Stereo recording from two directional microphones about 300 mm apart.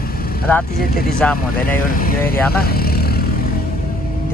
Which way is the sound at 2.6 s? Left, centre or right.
Left.